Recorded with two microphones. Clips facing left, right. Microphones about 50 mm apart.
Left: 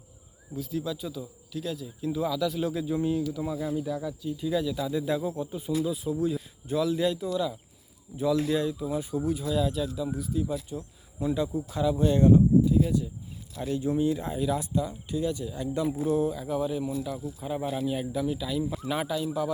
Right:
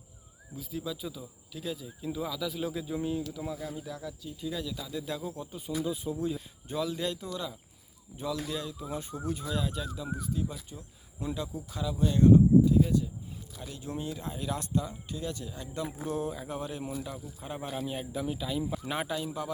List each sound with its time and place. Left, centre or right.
0.5 s speech: centre
8.3 s speech: centre
8.8 s speech: centre
11.3 s speech: centre
13.6 s speech: left
14.3 s speech: centre
15.8 s speech: centre